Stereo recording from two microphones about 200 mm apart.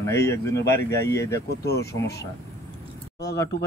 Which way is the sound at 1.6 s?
55° left (ahead or behind).